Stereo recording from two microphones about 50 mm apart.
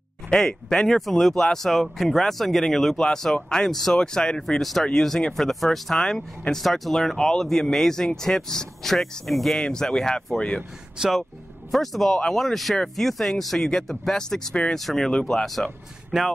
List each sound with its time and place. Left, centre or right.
0.3 s speech: centre
9.6 s speech: centre
11.0 s speech: centre
14.5 s speech: left
14.8 s speech: centre